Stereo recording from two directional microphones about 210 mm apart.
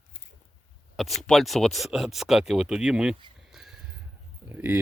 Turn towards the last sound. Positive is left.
turn(degrees=-10)  # may be behind; listen again after turning